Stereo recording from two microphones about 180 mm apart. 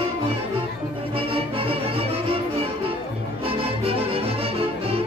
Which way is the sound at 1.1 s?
30° right (ahead or behind).